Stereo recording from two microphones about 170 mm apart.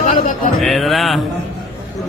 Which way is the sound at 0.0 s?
50° left (ahead or behind).